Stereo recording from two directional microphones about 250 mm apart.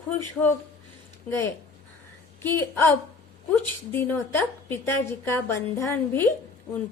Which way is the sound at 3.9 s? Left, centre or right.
Centre.